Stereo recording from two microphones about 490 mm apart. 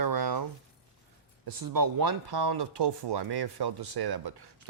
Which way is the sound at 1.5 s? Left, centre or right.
Right.